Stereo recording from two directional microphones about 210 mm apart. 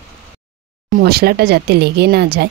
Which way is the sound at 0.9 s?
45° right (ahead or behind).